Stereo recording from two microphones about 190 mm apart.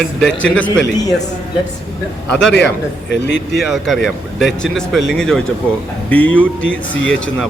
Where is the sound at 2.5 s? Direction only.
65° left (ahead or behind).